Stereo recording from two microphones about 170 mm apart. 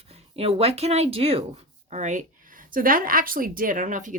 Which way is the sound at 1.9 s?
45° right (ahead or behind).